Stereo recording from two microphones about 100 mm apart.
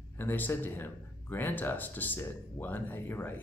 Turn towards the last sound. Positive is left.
turn(degrees=20)  # may be behind; listen again after turning